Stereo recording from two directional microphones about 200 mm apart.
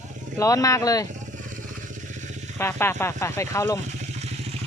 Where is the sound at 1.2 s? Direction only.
40° right (ahead or behind).